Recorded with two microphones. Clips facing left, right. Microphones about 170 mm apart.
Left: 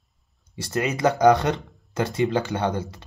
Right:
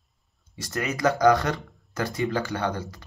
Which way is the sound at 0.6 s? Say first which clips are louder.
Left 4 dB; 30° left (ahead or behind).